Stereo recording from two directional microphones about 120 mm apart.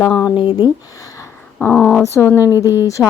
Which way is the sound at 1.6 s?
10° left (ahead or behind).